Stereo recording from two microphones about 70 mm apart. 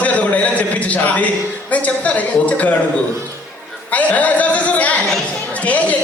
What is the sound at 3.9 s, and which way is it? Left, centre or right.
A man's voice, left.